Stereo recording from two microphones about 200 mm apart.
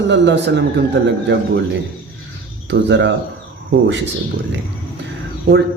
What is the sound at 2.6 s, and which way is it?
Speech, 65° right (ahead or behind).